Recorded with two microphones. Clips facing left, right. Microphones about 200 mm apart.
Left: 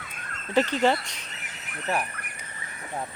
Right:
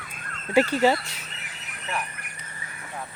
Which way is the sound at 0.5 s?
10° right (ahead or behind).